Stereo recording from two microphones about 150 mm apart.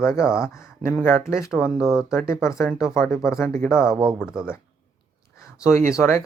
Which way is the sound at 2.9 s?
15° left (ahead or behind).